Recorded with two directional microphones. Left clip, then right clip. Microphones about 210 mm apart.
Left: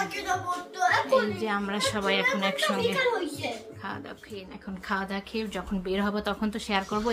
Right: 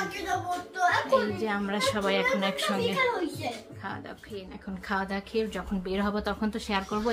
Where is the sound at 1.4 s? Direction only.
Centre (ahead or behind).